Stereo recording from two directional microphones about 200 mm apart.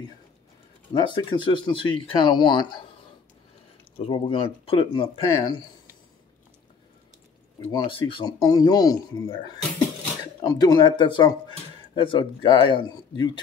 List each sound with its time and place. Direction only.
0.9 s speech: 25° left (ahead or behind)
4.0 s speech: 25° left (ahead or behind)
7.7 s speech: 25° left (ahead or behind)